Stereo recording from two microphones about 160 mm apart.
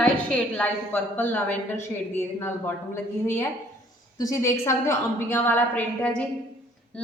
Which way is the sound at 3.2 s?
15° left (ahead or behind).